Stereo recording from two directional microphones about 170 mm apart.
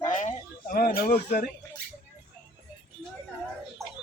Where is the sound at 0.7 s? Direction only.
65° left (ahead or behind).